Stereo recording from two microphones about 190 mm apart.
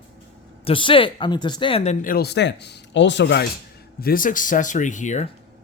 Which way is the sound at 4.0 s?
50° left (ahead or behind).